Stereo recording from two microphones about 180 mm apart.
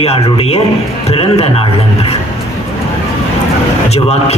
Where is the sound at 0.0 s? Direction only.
35° left (ahead or behind).